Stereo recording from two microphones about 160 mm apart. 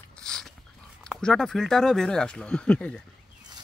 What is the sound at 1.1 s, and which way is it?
Speech, 5° left (ahead or behind).